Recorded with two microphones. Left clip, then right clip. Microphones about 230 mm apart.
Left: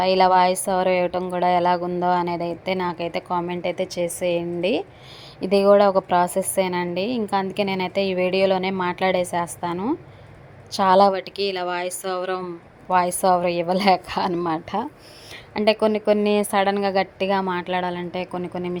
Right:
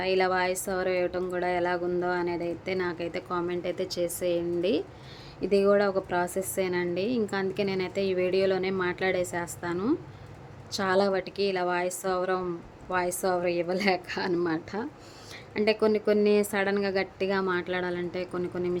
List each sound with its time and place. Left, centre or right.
0.0 s a woman's voice: centre